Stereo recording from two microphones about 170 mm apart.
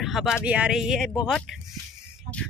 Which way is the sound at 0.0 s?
Centre (ahead or behind).